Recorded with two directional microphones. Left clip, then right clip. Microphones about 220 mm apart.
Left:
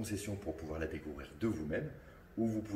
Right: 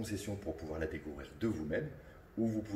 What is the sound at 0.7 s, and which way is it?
Speech, 10° left (ahead or behind).